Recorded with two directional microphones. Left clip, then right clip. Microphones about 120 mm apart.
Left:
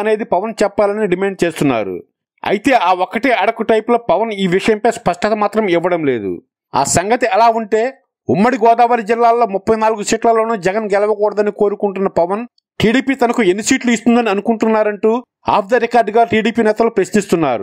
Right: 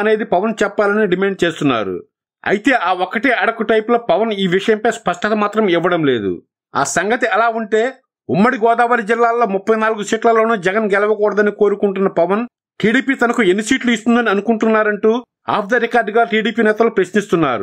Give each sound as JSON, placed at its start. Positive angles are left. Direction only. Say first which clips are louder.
{"t": 0.0, "sound": "speech", "louder": "even", "side_deg": 35}